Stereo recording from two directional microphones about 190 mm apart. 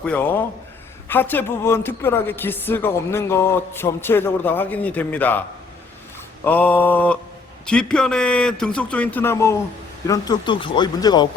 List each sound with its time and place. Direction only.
0.0 s a woman's voice: 10° left (ahead or behind)